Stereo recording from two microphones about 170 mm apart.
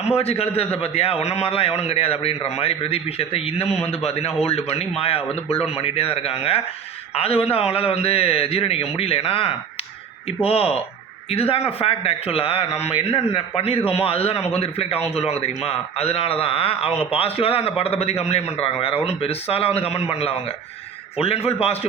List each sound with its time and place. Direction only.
0.2 s a man's voice: 35° left (ahead or behind)